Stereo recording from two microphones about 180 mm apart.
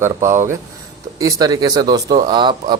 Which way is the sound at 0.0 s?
15° right (ahead or behind).